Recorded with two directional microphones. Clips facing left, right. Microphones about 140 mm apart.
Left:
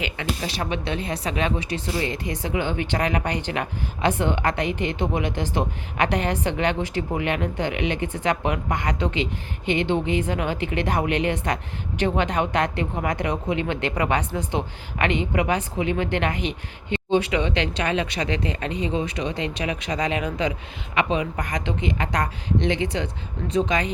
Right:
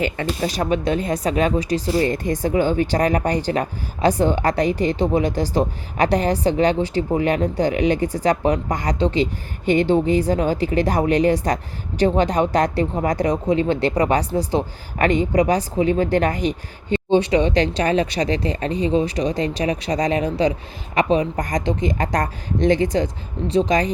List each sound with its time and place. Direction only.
0.0 s speech: 45° right (ahead or behind)